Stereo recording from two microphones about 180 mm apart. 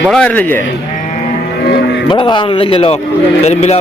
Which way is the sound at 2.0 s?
25° left (ahead or behind).